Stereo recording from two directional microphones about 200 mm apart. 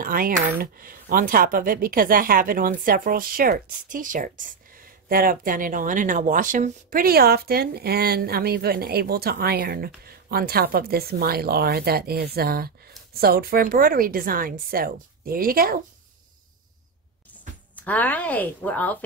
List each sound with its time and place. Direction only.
0.0 s speech: 45° right (ahead or behind)
17.7 s a woman's voice: 10° left (ahead or behind)